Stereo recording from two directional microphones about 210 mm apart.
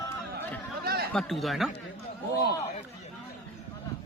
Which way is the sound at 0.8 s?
50° right (ahead or behind).